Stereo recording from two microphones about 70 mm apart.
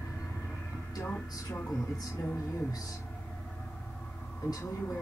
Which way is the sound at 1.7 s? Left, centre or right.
Centre.